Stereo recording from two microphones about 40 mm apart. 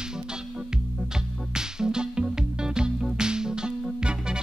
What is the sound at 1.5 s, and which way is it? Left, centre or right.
Music, centre.